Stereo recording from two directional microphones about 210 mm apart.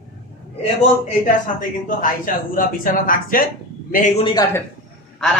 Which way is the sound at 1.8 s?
40° left (ahead or behind).